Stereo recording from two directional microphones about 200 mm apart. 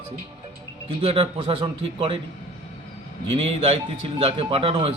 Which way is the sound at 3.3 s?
30° right (ahead or behind).